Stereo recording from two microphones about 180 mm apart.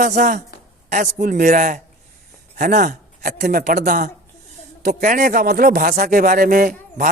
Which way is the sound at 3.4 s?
60° right (ahead or behind).